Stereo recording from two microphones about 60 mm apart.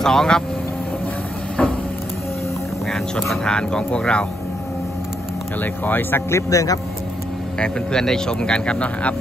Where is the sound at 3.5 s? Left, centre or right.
Centre.